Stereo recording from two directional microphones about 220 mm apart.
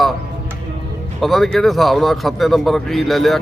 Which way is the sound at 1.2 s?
Centre (ahead or behind).